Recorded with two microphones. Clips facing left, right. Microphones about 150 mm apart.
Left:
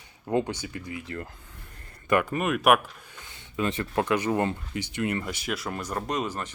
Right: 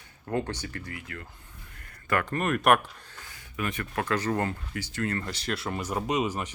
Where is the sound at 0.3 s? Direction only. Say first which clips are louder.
Left 4 dB; 15° left (ahead or behind).